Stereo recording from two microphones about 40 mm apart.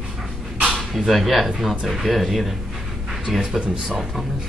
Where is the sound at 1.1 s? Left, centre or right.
Centre.